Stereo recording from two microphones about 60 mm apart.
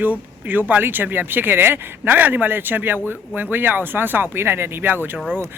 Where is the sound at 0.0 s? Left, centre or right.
Right.